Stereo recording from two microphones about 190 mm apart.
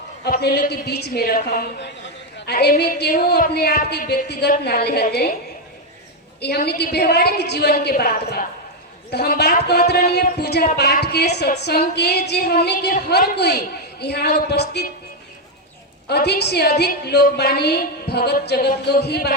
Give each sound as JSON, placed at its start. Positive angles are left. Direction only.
{"t": 0.3, "sound": "a woman's voice", "side_deg": 55}
{"t": 6.4, "sound": "a woman's voice", "side_deg": 60}
{"t": 16.0, "sound": "a woman's voice", "side_deg": 60}